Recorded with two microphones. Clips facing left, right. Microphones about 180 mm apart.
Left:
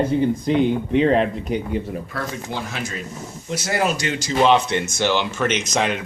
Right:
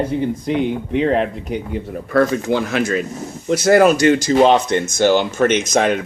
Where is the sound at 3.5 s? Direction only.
55° right (ahead or behind).